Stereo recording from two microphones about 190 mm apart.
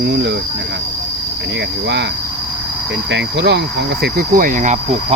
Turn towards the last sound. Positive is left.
turn(degrees=-45)  # may be behind; listen again after turning